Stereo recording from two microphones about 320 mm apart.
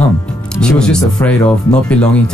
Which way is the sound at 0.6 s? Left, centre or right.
Centre.